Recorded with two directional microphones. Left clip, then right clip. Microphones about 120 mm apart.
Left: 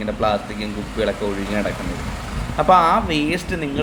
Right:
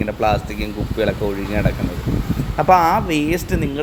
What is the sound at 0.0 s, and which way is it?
Speech, 90° right.